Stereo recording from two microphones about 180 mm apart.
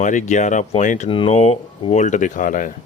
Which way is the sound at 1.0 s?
30° left (ahead or behind).